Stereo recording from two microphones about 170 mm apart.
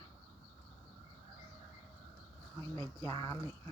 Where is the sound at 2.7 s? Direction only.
20° left (ahead or behind).